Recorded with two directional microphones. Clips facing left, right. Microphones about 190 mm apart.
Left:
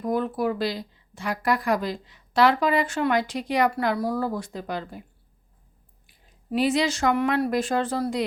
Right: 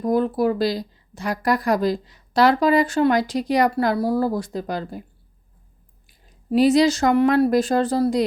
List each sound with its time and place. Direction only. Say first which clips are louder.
0.0 s a woman's voice: right 5 dB; 35° right (ahead or behind)
6.1 s speech: right 6 dB; 40° right (ahead or behind)